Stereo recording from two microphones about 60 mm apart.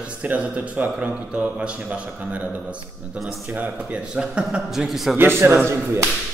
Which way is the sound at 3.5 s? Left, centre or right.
Right.